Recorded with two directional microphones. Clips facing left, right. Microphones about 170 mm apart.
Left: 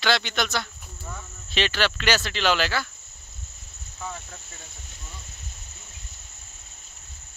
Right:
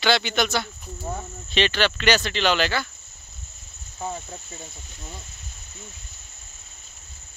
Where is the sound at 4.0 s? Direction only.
30° right (ahead or behind).